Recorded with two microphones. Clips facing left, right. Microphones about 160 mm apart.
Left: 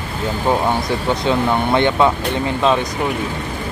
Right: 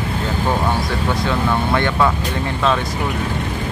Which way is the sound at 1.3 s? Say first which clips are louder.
Left 4 dB; 20° left (ahead or behind).